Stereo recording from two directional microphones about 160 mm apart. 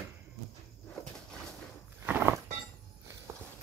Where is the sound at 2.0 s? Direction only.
10° right (ahead or behind).